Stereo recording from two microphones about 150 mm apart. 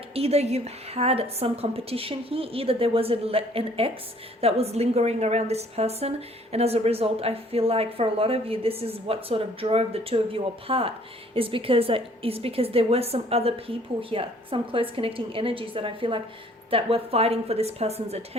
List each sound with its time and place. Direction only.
0.1 s a woman's voice: 40° right (ahead or behind)